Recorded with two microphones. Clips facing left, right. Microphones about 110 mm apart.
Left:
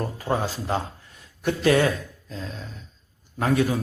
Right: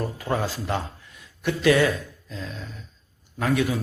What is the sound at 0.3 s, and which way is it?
Speech, 25° left (ahead or behind).